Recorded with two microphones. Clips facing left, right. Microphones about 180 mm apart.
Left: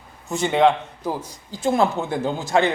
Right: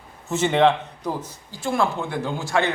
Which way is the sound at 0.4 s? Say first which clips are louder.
Left 1 dB; 5° left (ahead or behind).